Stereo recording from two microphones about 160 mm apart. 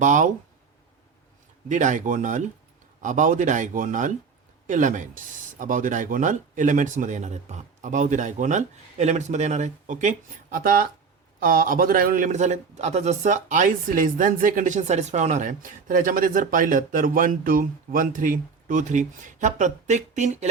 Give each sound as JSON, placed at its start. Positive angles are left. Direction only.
{"t": 0.0, "sound": "speech", "side_deg": -50}
{"t": 1.6, "sound": "a man's voice", "side_deg": -50}